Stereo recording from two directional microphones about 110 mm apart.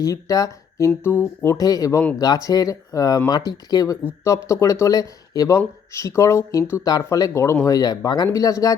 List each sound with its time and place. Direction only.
0.0 s speech: 35° left (ahead or behind)
1.0 s speech: 20° left (ahead or behind)